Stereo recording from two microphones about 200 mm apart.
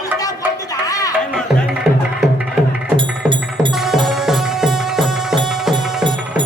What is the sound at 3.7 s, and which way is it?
Music, centre (ahead or behind).